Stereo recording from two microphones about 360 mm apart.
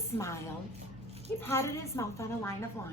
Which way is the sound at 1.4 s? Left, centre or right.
Centre.